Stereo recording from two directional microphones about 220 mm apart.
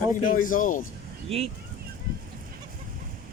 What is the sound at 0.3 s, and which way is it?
Speech, 40° left (ahead or behind).